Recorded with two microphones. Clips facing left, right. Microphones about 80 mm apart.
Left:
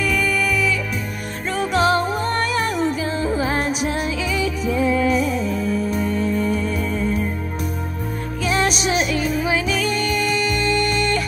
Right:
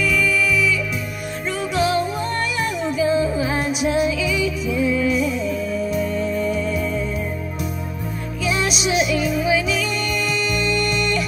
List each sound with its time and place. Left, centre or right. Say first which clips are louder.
0.0 s music: right 1 dB; left
8.5 s music: left 1 dB; left